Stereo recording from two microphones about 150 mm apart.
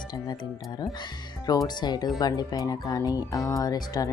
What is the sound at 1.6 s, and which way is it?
Speech, 30° left (ahead or behind).